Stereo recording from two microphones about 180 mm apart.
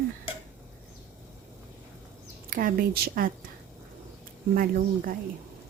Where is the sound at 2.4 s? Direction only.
50° right (ahead or behind).